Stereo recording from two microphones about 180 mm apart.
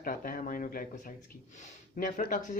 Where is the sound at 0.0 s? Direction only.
50° left (ahead or behind).